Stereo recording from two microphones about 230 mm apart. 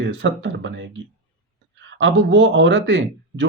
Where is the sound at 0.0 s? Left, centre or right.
Right.